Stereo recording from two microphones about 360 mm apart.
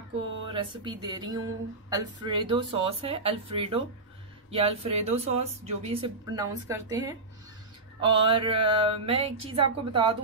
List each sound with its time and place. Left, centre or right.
0.5 s speech: centre